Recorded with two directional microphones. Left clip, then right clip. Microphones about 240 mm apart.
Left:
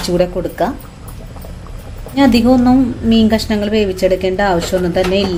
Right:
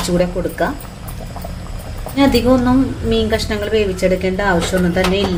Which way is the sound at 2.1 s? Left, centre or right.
Left.